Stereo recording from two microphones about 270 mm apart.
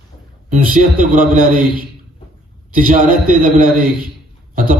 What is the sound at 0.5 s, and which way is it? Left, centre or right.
A man's voice, right.